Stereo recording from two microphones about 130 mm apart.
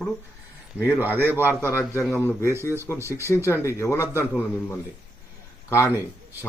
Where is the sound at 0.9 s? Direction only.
15° right (ahead or behind).